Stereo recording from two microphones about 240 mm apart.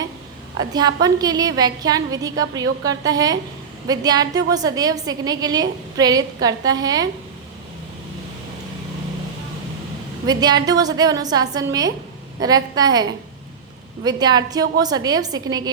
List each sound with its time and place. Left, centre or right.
0.7 s a woman's voice: centre
10.2 s a woman's voice: centre